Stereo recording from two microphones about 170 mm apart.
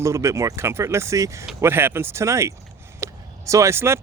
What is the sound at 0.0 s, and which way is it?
Speech, 15° right (ahead or behind).